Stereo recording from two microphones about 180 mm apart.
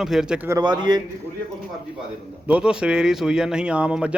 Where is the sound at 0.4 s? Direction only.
20° right (ahead or behind).